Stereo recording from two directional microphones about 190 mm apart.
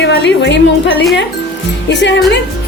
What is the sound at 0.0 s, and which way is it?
A woman's voice, 65° left (ahead or behind).